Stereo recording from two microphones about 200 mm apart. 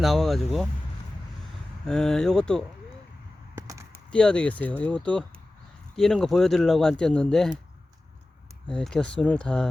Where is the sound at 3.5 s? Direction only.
15° right (ahead or behind).